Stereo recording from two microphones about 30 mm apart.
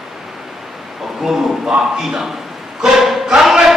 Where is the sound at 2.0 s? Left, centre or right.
Centre.